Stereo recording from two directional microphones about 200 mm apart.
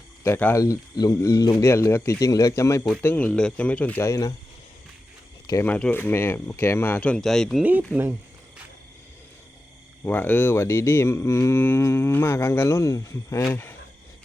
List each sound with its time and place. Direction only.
0.3 s speech: 10° left (ahead or behind)
5.6 s speech: 5° left (ahead or behind)
10.0 s speech: 10° left (ahead or behind)